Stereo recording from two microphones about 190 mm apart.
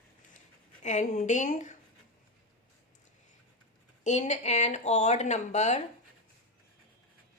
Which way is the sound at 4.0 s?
35° left (ahead or behind).